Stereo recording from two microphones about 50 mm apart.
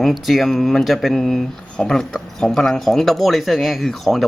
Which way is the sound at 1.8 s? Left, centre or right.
Centre.